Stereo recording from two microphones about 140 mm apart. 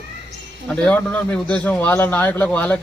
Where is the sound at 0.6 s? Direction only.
10° left (ahead or behind).